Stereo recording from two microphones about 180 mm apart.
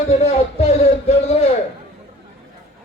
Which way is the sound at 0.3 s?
35° left (ahead or behind).